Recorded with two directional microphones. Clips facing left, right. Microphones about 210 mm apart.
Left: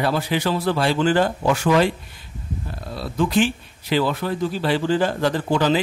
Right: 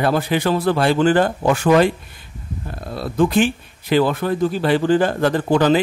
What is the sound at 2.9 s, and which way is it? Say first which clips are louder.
A man's voice: right 4 dB; 50° right (ahead or behind).